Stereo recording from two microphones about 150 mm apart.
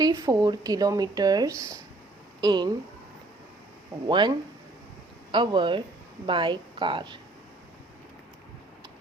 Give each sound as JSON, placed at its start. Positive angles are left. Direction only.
{"t": 0.0, "sound": "speech", "side_deg": -25}
{"t": 4.1, "sound": "a woman's voice", "side_deg": -30}